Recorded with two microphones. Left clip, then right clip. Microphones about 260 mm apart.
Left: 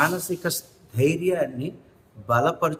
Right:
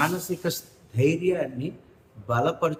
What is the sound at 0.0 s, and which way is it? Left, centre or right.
Speech, centre.